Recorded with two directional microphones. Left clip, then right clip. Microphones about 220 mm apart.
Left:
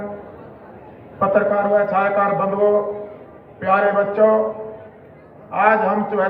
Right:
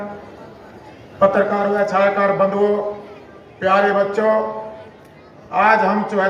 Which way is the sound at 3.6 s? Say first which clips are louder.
Right 1 dB; 55° right (ahead or behind).